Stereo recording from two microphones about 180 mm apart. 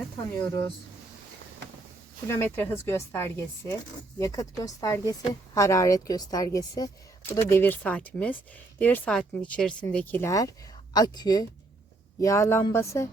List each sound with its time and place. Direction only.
2.2 s speech: 15° left (ahead or behind)